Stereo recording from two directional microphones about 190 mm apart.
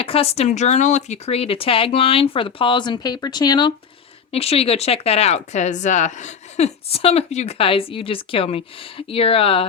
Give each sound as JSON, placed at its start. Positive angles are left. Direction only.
{"t": 0.0, "sound": "speech", "side_deg": 30}
{"t": 4.3, "sound": "speech", "side_deg": 30}